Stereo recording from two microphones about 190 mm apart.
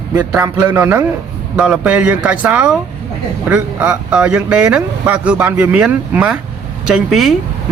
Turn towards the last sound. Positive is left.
turn(degrees=0)  # may be behind; listen again after turning